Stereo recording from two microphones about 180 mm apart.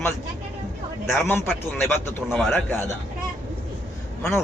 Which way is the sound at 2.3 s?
Centre (ahead or behind).